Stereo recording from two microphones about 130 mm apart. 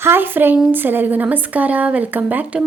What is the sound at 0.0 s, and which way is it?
A woman's voice, 15° right (ahead or behind).